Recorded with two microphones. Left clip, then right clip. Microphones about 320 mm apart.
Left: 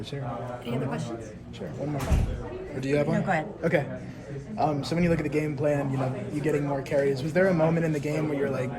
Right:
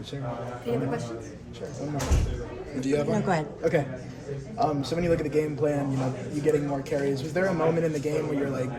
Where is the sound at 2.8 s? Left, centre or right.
Left.